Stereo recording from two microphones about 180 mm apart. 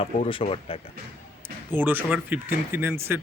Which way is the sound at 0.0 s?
30° left (ahead or behind).